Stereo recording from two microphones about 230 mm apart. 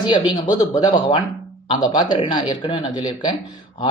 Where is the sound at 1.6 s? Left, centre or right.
Centre.